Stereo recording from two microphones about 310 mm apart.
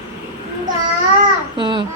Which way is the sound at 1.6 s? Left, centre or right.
Centre.